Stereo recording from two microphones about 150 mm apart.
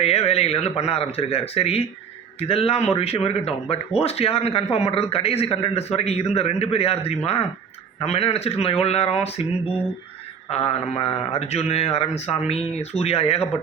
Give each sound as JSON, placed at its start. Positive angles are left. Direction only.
{"t": 0.0, "sound": "a man's voice", "side_deg": 45}
{"t": 10.5, "sound": "a man's voice", "side_deg": 45}